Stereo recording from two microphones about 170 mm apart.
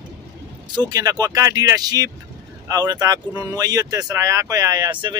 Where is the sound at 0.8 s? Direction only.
20° right (ahead or behind).